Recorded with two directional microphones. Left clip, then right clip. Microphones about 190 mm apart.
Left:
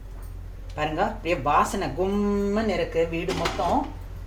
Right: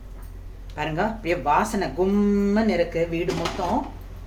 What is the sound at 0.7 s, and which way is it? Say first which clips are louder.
Speech: even; 25° right (ahead or behind).